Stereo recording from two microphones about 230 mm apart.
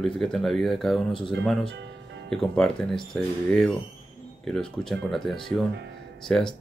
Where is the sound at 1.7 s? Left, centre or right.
Right.